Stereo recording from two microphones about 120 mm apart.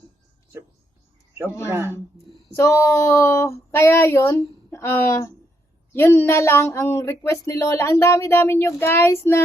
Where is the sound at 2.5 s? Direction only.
20° left (ahead or behind).